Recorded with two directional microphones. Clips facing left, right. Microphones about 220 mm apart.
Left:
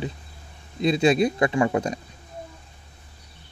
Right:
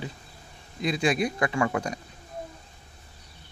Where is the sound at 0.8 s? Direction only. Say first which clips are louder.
Left 6 dB; 25° left (ahead or behind).